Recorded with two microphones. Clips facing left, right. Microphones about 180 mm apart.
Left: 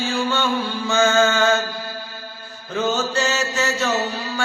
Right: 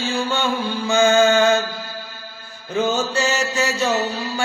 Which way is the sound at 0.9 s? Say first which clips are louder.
Right 3 dB; 15° right (ahead or behind).